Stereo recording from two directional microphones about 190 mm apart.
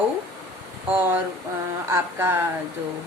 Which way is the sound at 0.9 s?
10° right (ahead or behind).